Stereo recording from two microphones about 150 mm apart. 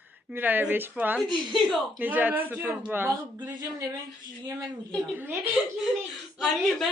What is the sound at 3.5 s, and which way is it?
Speech, 25° right (ahead or behind).